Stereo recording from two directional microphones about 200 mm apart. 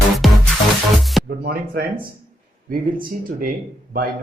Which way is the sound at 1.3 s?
50° right (ahead or behind).